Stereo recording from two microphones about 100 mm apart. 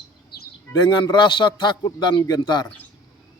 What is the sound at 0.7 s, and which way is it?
A man's voice, 45° left (ahead or behind).